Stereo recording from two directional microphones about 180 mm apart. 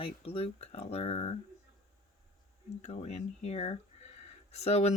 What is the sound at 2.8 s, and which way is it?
Speech, 35° left (ahead or behind).